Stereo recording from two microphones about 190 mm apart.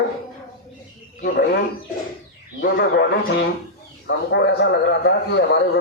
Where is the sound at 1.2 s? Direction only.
50° left (ahead or behind).